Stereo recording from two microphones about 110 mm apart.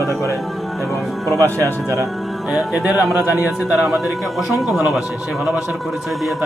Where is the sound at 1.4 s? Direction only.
30° right (ahead or behind).